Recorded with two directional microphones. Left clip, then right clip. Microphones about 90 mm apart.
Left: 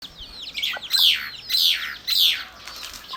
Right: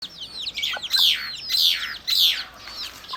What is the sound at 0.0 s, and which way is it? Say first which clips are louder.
Chicken: right 4 dB; 30° right (ahead or behind).